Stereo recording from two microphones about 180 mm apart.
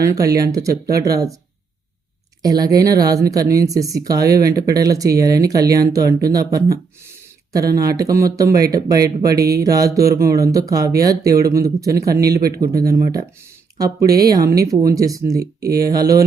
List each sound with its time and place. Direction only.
0.0 s speech: 20° right (ahead or behind)
2.4 s speech: 20° right (ahead or behind)
7.8 s speech: 20° right (ahead or behind)